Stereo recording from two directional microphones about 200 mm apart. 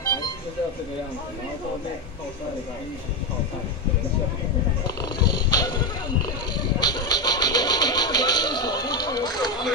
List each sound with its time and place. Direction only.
4.8 s dog: 20° left (ahead or behind)
6.5 s music: 20° left (ahead or behind)